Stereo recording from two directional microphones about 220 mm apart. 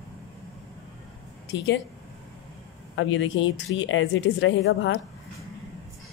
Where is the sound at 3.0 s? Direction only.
60° left (ahead or behind).